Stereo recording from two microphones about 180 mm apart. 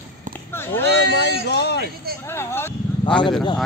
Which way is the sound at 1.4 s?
70° left (ahead or behind).